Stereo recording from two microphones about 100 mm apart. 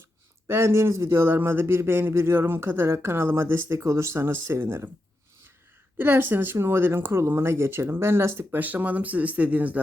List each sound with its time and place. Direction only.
0.4 s speech: 25° right (ahead or behind)
6.0 s speech: 20° right (ahead or behind)